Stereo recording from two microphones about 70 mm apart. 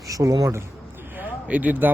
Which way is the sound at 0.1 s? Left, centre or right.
Right.